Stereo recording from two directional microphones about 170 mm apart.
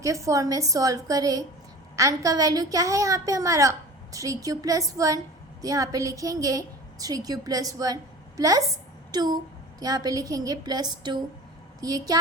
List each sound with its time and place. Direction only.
0.0 s a woman's voice: 20° right (ahead or behind)